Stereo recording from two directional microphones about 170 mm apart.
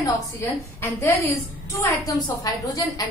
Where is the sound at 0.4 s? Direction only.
15° left (ahead or behind).